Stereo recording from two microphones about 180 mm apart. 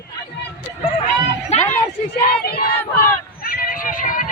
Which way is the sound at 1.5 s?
35° left (ahead or behind).